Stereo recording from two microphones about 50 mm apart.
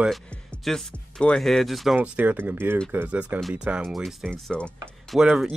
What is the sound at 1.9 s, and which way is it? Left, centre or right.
Speech, right.